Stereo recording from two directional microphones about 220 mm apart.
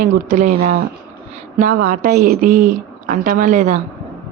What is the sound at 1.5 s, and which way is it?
A woman's voice, 40° right (ahead or behind).